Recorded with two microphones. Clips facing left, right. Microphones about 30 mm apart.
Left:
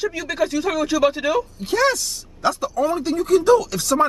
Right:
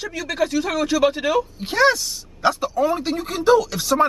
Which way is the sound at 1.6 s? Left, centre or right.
Right.